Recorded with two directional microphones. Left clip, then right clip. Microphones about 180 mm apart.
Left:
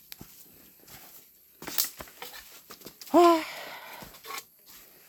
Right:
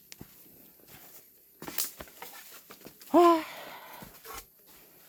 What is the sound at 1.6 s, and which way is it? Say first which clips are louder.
Patter: left 5 dB; 20° left (ahead or behind).